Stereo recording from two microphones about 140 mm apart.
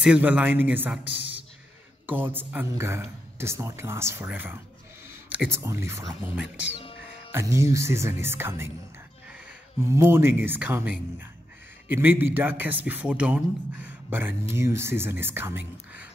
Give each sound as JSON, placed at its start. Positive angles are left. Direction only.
{"t": 0.0, "sound": "speech", "side_deg": -10}
{"t": 2.0, "sound": "speech", "side_deg": -15}
{"t": 5.0, "sound": "a sound", "side_deg": -15}
{"t": 5.6, "sound": "speech", "side_deg": -20}
{"t": 7.3, "sound": "speech", "side_deg": -20}